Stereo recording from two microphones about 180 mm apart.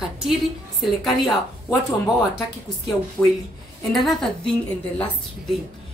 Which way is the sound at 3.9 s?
Centre (ahead or behind).